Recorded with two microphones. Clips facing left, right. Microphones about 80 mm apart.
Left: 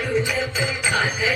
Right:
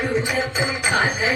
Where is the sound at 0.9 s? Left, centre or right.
Right.